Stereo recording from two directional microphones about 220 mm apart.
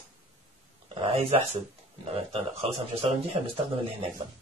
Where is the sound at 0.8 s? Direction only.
30° right (ahead or behind).